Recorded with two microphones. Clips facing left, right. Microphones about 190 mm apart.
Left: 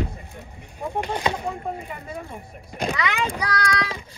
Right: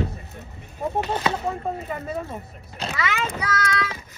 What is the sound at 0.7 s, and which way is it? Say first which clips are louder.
Speech: right 2 dB; 20° right (ahead or behind).